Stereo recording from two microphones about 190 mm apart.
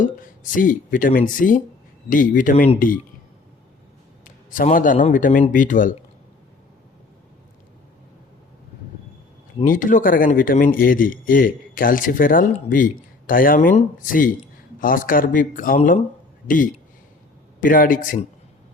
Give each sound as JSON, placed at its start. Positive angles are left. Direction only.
{"t": 0.0, "sound": "speech", "side_deg": 45}
{"t": 4.2, "sound": "speech", "side_deg": 45}
{"t": 9.6, "sound": "speech", "side_deg": 45}
{"t": 17.6, "sound": "speech", "side_deg": 45}